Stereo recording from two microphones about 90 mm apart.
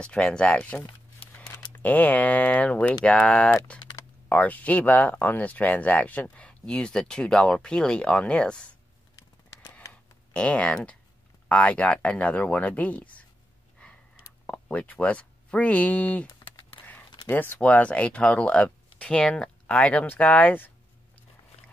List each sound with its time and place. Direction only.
0.0 s speech: 10° left (ahead or behind)
10.3 s speech: 15° left (ahead or behind)
14.4 s speech: 15° left (ahead or behind)
16.8 s typing: 65° left (ahead or behind)
17.3 s speech: 20° left (ahead or behind)